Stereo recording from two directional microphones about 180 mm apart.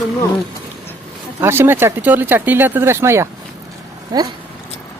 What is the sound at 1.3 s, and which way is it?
Speech, 15° right (ahead or behind).